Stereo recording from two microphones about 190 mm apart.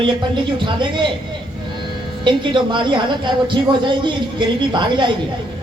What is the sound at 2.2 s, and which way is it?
Speech, 25° right (ahead or behind).